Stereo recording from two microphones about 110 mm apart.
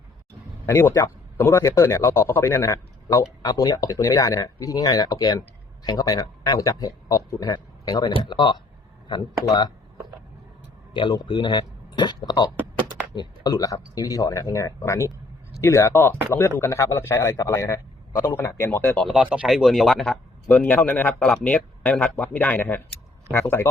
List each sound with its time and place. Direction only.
0.6 s a man's voice: 20° left (ahead or behind); by 9.7 s 40° left (ahead or behind)
10.9 s a man's voice: 45° left (ahead or behind); by 18.9 s 20° left (ahead or behind)
19.1 s speech: 10° right (ahead or behind)
20.5 s a man's voice: 15° left (ahead or behind)